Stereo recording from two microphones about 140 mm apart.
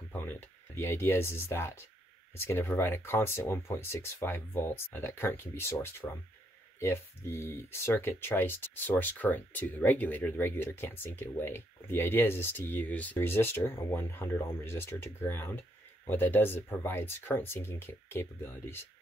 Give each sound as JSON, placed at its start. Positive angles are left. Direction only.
{"t": 0.7, "sound": "speech", "side_deg": 15}